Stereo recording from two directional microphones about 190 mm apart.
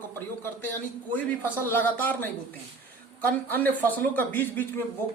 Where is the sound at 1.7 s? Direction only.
10° left (ahead or behind).